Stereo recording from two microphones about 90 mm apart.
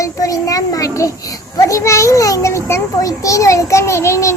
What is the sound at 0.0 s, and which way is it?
Child singing, 40° left (ahead or behind).